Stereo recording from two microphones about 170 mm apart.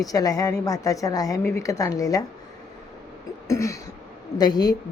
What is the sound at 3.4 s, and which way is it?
Throat clearing, 20° left (ahead or behind).